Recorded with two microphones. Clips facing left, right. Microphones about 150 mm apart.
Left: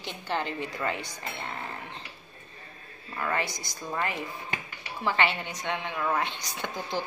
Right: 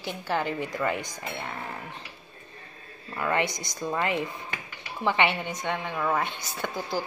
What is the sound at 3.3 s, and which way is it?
Speech, 20° right (ahead or behind).